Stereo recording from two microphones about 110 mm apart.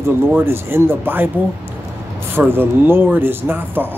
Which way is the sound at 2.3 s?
20° right (ahead or behind).